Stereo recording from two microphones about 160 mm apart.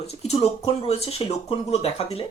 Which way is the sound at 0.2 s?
40° left (ahead or behind).